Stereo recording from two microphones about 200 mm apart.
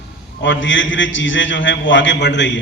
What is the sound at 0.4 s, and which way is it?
A man's voice, 65° left (ahead or behind).